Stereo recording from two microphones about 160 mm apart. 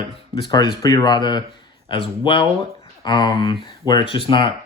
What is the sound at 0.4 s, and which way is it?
Speech, 30° left (ahead or behind).